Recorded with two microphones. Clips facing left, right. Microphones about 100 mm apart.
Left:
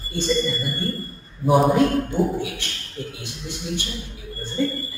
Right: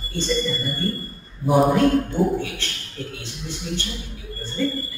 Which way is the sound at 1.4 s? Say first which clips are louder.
Even; centre (ahead or behind).